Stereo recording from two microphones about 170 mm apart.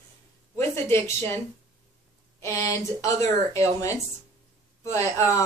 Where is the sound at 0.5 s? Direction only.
15° left (ahead or behind).